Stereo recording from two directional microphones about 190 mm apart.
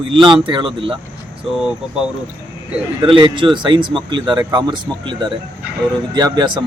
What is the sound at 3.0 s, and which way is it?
Speech, 25° right (ahead or behind).